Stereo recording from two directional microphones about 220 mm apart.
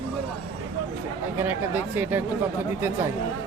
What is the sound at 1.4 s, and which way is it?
Speech, 10° right (ahead or behind).